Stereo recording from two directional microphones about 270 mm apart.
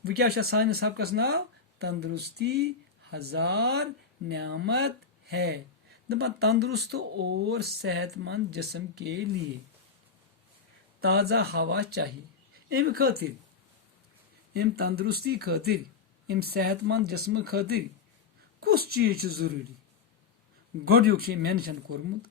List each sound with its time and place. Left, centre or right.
0.0 s speech: right
11.0 s speech: right
14.5 s speech: right
20.8 s speech: right